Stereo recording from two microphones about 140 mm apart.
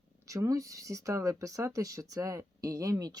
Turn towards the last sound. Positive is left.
turn(degrees=-25)  # may be behind; listen again after turning